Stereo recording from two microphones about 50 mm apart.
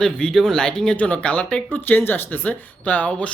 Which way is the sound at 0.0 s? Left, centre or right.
Centre.